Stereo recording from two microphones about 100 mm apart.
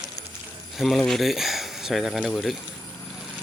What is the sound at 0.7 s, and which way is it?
Speech, centre (ahead or behind).